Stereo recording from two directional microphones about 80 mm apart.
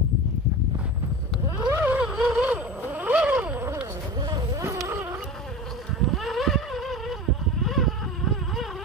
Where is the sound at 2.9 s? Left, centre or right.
Centre.